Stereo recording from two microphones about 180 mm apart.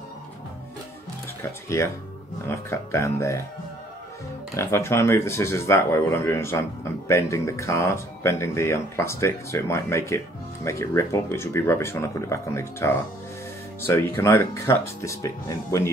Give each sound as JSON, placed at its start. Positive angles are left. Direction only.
{"t": 2.4, "sound": "speech", "side_deg": 15}
{"t": 4.6, "sound": "speech", "side_deg": 15}